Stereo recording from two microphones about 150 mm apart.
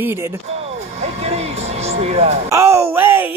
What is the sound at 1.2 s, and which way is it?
Music, 45° right (ahead or behind).